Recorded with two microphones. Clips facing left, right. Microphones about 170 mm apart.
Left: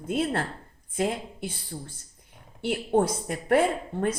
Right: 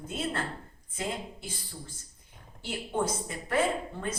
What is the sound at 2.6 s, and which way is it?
Speech, 60° left (ahead or behind).